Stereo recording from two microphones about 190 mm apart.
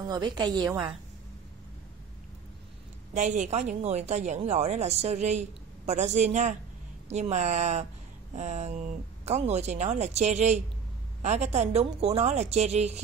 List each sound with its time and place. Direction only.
0.1 s a woman's voice: 20° right (ahead or behind)
3.2 s speech: 40° right (ahead or behind)